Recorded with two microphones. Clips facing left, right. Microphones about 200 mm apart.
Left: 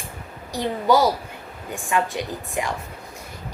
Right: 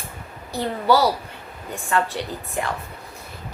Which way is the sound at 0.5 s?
15° left (ahead or behind).